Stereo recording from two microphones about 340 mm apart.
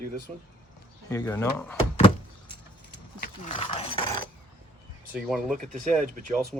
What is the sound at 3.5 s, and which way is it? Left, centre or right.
Speech, centre.